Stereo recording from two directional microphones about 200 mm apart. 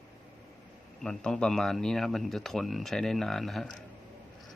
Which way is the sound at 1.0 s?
5° left (ahead or behind).